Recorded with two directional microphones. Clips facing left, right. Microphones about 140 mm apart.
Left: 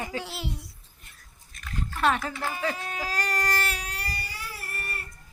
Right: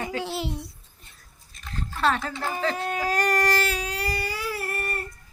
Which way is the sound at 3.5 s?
90° right.